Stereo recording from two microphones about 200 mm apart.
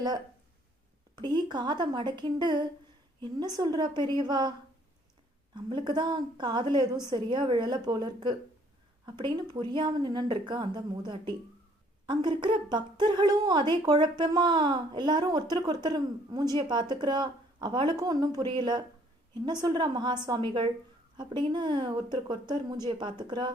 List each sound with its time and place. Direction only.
1.1 s a woman's voice: 20° right (ahead or behind)
5.5 s a woman's voice: 20° right (ahead or behind)